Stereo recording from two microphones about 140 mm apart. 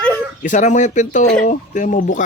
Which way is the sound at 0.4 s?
60° left (ahead or behind).